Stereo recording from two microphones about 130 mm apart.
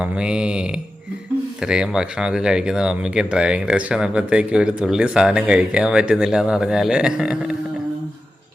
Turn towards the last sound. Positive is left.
turn(degrees=-5)  # may be behind; listen again after turning